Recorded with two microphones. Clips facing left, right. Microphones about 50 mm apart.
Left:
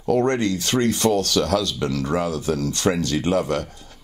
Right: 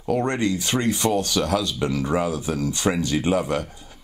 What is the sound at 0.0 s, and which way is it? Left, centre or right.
Speech, centre.